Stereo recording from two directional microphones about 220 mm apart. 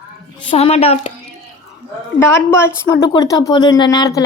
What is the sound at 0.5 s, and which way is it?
Speech, 25° left (ahead or behind).